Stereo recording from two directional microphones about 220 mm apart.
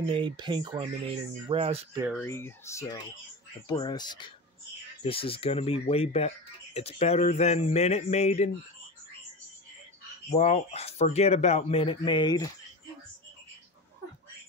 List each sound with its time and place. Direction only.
0.1 s speech: 20° right (ahead or behind)
2.0 s speech: 5° right (ahead or behind)
2.2 s speech: 10° left (ahead or behind); by 8.5 s 30° left (ahead or behind)
10.3 s speech: 30° left (ahead or behind)